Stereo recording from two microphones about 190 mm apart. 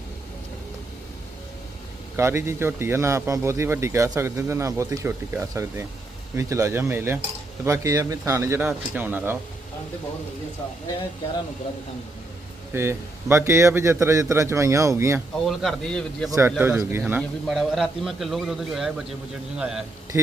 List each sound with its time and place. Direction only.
2.1 s speech: 15° right (ahead or behind)
12.7 s speech: 15° right (ahead or behind)
15.4 s a man's voice: centre (ahead or behind)
20.1 s speech: 15° right (ahead or behind)